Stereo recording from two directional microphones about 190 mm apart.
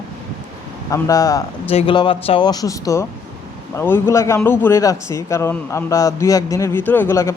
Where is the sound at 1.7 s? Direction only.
25° left (ahead or behind).